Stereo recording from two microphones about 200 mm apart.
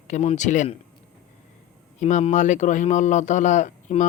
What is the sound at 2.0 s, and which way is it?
A man's voice, 35° left (ahead or behind).